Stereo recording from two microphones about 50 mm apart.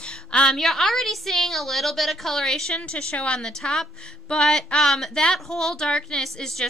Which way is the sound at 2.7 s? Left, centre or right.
Left.